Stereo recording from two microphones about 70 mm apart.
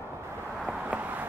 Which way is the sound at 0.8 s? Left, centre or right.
Right.